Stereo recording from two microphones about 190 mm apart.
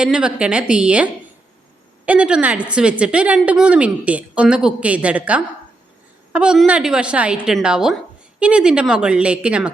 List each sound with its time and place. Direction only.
0.0 s a woman's voice: 5° right (ahead or behind)